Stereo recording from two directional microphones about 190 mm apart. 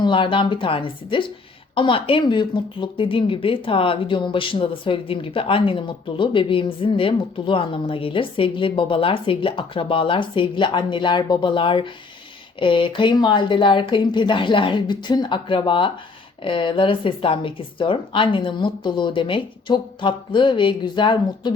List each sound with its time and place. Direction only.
0.0 s a woman's voice: 25° left (ahead or behind)